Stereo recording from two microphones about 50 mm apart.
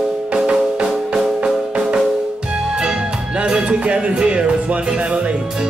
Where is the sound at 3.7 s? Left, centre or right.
Right.